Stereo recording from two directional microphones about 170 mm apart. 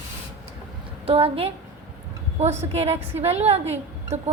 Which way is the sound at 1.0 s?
35° right (ahead or behind).